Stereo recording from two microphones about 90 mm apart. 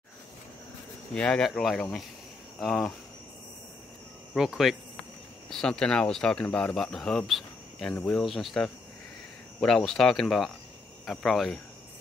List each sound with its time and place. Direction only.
1.1 s speech: 10° left (ahead or behind)
4.3 s speech: centre (ahead or behind)
5.5 s speech: 10° left (ahead or behind)
6.4 s cricket: 10° left (ahead or behind)
8.0 s speech: centre (ahead or behind)